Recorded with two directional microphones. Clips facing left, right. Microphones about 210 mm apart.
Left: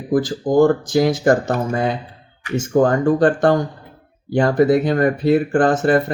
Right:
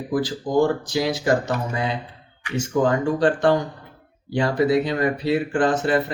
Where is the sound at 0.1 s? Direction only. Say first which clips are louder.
Left 5 dB; 45° left (ahead or behind).